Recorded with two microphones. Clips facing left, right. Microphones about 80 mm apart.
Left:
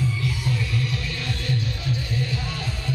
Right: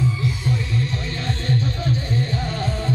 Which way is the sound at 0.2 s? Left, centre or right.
Right.